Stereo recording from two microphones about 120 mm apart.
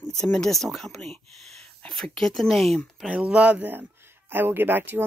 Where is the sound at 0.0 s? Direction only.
5° left (ahead or behind).